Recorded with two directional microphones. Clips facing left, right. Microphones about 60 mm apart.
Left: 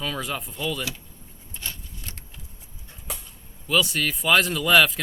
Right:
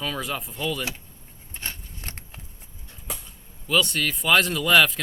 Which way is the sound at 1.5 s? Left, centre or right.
Right.